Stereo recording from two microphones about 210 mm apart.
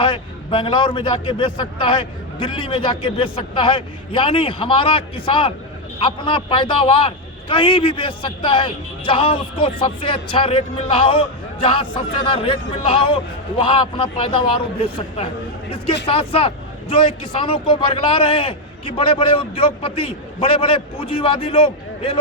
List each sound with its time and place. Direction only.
0.0 s a man's voice: 25° left (ahead or behind)